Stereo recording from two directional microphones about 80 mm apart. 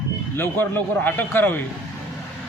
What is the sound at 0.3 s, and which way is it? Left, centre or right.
A man's voice, left.